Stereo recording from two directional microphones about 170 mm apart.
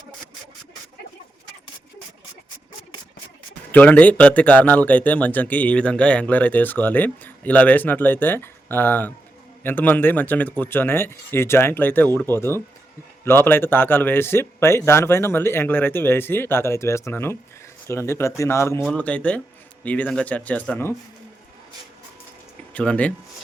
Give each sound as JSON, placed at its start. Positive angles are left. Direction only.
{"t": 3.7, "sound": "speech", "side_deg": 10}
{"t": 22.7, "sound": "speech", "side_deg": 10}